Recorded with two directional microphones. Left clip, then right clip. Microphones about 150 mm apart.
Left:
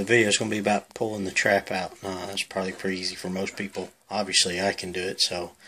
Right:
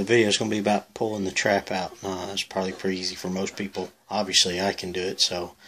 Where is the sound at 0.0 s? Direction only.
Centre (ahead or behind).